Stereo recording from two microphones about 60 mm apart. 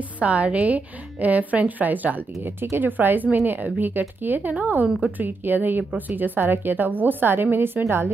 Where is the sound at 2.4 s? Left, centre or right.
Right.